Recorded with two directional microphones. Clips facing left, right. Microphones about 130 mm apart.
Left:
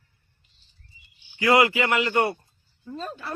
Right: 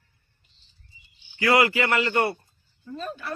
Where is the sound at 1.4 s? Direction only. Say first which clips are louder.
Left 1 dB; 20° left (ahead or behind).